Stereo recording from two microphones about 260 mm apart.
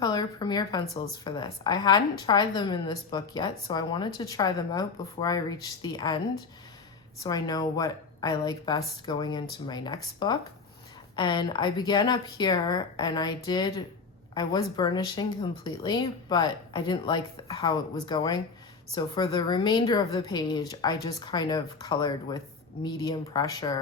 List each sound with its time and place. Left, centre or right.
0.0 s speech: centre
7.2 s speech: centre